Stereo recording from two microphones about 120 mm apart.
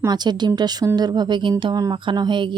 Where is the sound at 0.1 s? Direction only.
35° right (ahead or behind).